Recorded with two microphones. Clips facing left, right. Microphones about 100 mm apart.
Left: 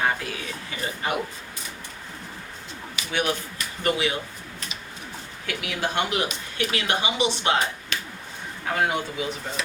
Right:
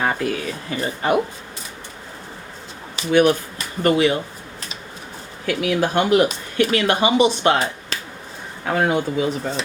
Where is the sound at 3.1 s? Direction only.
40° right (ahead or behind).